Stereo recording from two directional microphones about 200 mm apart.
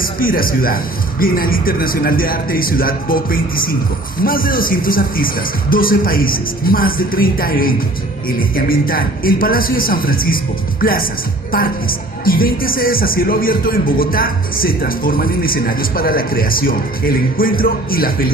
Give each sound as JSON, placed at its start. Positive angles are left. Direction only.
{"t": 0.0, "sound": "speech", "side_deg": 45}